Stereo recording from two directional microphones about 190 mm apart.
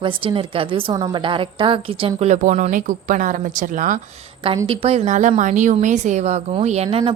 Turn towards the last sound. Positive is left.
turn(degrees=-30)  # may be behind; listen again after turning